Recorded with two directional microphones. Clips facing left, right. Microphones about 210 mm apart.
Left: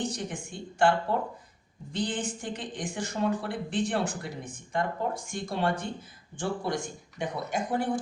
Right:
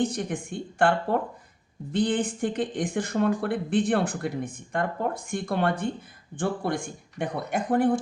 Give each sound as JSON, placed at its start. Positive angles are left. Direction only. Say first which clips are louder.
{"t": 0.2, "sound": "speech", "louder": "right 6 dB", "side_deg": -55}